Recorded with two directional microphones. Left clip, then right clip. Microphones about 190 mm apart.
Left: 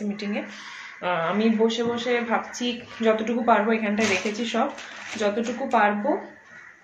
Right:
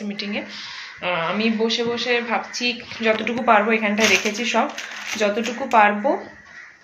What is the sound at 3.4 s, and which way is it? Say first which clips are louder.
Speech: right 5 dB; 15° right (ahead or behind).